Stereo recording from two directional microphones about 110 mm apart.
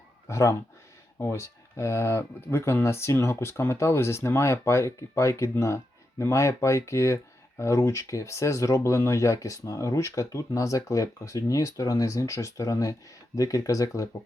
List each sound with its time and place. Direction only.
0.3 s speech: 25° left (ahead or behind)